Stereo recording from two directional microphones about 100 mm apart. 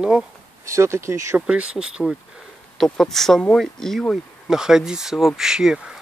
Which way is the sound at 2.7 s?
5° left (ahead or behind).